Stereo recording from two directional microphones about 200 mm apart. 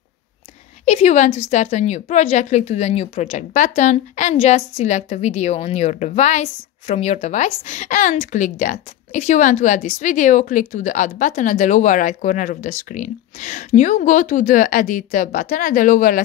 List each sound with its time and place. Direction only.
0.8 s a woman's voice: 35° left (ahead or behind)